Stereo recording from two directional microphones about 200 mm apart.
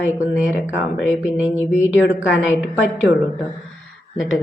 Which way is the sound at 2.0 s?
65° left (ahead or behind).